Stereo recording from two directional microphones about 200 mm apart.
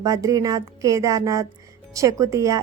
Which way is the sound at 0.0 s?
15° right (ahead or behind).